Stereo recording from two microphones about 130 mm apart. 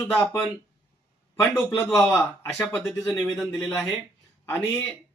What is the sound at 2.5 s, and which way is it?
Speech, 20° left (ahead or behind).